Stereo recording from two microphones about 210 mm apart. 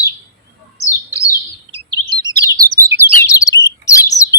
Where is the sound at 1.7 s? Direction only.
20° right (ahead or behind).